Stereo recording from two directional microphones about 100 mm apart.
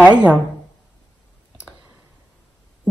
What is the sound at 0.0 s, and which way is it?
Speech, 15° right (ahead or behind).